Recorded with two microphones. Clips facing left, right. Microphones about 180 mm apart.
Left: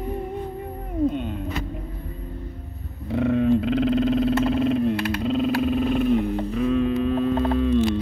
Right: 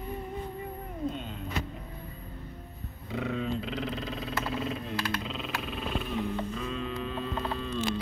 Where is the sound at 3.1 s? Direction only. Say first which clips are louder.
Left 12 dB; 60° left (ahead or behind).